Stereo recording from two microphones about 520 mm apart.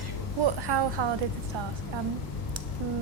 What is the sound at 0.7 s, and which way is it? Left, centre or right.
Speech, right.